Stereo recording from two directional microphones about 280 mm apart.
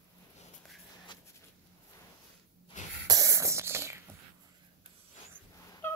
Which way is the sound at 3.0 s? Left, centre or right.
Centre.